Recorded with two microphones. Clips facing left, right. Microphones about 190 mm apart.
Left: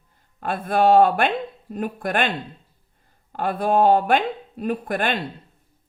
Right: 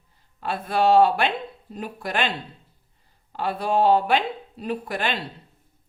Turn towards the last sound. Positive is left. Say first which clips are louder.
# left 3 dB
turn(degrees=50)  # may be behind; listen again after turning